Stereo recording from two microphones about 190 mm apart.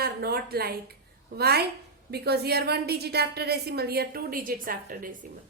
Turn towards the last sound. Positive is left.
turn(degrees=-45)  # may be behind; listen again after turning